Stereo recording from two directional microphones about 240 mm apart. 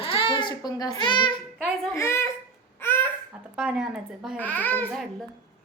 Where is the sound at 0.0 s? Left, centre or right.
Left.